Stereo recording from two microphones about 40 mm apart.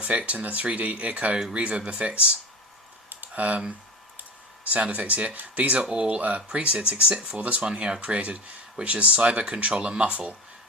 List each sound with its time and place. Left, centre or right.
0.0 s speech: right
3.1 s typing: right
4.6 s speech: right
5.9 s speech: right
7.6 s speech: right
10.0 s speech: right